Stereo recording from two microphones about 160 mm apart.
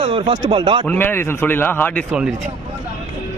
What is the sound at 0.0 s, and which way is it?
Speech, 35° right (ahead or behind).